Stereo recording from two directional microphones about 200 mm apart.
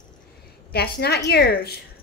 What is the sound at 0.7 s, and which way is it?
A woman's voice, 55° left (ahead or behind).